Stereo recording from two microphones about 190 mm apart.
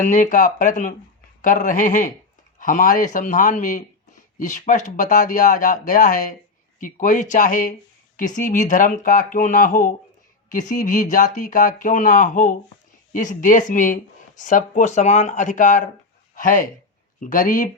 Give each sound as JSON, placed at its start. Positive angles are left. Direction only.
{"t": 0.0, "sound": "speech", "side_deg": 45}